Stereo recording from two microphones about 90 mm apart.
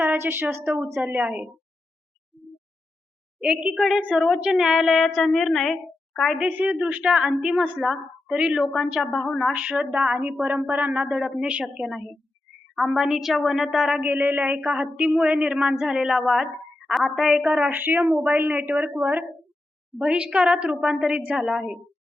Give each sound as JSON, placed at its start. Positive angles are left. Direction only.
{"t": 0.0, "sound": "a woman's voice", "side_deg": -20}
{"t": 0.6, "sound": "speech", "side_deg": -10}
{"t": 3.4, "sound": "speech", "side_deg": -10}
{"t": 3.8, "sound": "a woman's voice", "side_deg": 0}
{"t": 6.6, "sound": "a woman's voice", "side_deg": -15}
{"t": 9.5, "sound": "speech", "side_deg": -15}
{"t": 11.2, "sound": "a woman's voice", "side_deg": 0}
{"t": 11.4, "sound": "speech", "side_deg": -15}
{"t": 12.7, "sound": "a woman's voice", "side_deg": 0}
{"t": 14.0, "sound": "a woman's voice", "side_deg": -20}
{"t": 17.7, "sound": "a woman's voice", "side_deg": -20}